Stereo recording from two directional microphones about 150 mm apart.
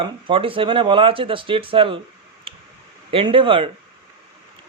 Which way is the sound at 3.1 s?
35° right (ahead or behind).